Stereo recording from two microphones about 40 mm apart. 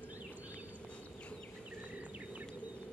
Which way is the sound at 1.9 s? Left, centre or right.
Right.